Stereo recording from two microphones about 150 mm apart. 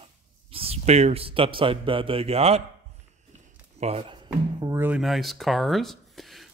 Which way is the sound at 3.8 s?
40° right (ahead or behind).